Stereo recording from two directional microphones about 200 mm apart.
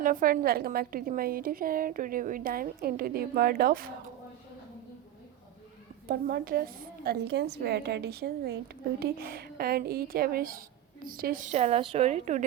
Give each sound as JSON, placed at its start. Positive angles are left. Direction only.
{"t": 0.0, "sound": "a woman's voice", "side_deg": -45}
{"t": 6.1, "sound": "a woman's voice", "side_deg": -50}